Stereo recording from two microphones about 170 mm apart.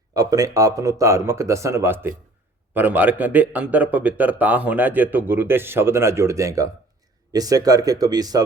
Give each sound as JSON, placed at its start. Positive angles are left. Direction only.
{"t": 0.1, "sound": "a man's voice", "side_deg": -20}